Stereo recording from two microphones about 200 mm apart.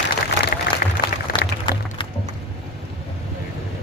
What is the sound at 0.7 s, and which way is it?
Applause, 60° left (ahead or behind).